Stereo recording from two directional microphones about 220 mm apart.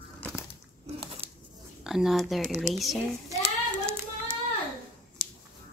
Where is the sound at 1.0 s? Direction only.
25° right (ahead or behind).